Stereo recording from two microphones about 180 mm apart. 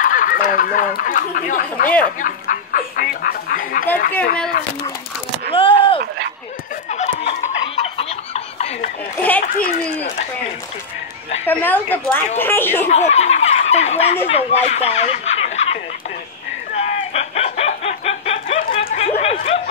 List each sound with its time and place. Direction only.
0.0 s speech: 50° left (ahead or behind)
5.5 s vehicle: 30° left (ahead or behind)
6.9 s a sound: 35° left (ahead or behind)
9.4 s speech: 50° left (ahead or behind)
11.4 s speech: 10° left (ahead or behind)
12.8 s speech: 40° left (ahead or behind)
16.7 s a sound: 40° left (ahead or behind)